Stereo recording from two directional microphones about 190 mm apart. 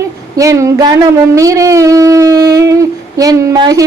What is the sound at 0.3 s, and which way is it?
Speech, 15° right (ahead or behind).